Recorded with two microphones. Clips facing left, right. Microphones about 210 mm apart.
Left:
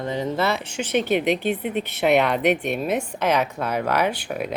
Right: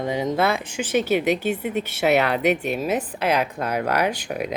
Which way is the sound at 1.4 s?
45° right (ahead or behind).